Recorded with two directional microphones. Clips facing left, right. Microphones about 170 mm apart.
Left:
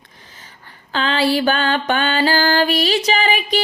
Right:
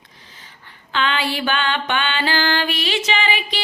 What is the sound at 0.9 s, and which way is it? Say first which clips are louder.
Music: left 5 dB; 35° left (ahead or behind).